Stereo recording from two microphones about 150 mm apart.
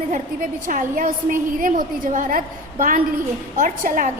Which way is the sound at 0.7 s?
60° right (ahead or behind).